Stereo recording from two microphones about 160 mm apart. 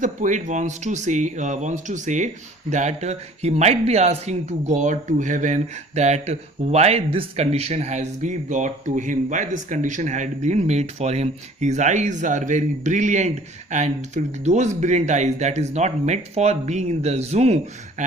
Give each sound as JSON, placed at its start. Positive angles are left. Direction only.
{"t": 0.0, "sound": "speech", "side_deg": -50}